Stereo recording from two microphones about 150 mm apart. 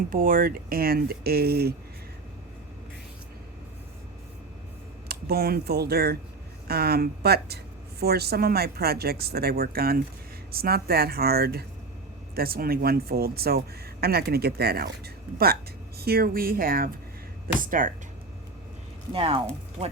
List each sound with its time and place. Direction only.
0.1 s speech: 70° right (ahead or behind); by 1.7 s 90° right
5.0 s a woman's voice: 90° right; by 16.9 s 75° right (ahead or behind)
17.6 s speech: 65° right (ahead or behind)
19.1 s speech: 40° right (ahead or behind)